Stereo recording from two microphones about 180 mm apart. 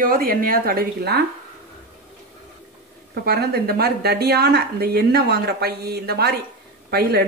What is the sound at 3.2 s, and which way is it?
A woman's voice, 60° right (ahead or behind).